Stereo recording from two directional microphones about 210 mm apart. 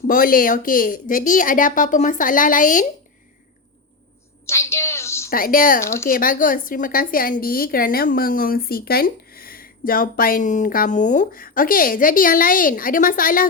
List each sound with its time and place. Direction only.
0.1 s a woman's voice: 40° left (ahead or behind)
4.4 s a sound: 15° left (ahead or behind)
5.3 s a woman's voice: 40° left (ahead or behind)
5.8 s speech: 10° left (ahead or behind)
6.1 s a woman's voice: 40° left (ahead or behind)